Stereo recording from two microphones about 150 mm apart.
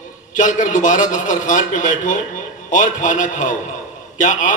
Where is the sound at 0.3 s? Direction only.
55° left (ahead or behind).